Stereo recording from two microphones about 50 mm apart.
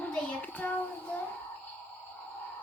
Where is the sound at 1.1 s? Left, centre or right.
Left.